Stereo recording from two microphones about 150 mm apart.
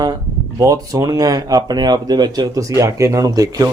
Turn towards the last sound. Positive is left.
turn(degrees=-25)  # may be behind; listen again after turning